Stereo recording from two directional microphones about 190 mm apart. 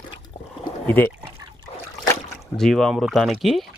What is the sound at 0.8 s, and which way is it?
Speech, 10° left (ahead or behind).